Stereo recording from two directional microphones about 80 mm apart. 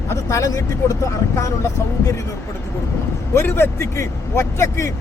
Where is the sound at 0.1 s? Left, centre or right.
Left.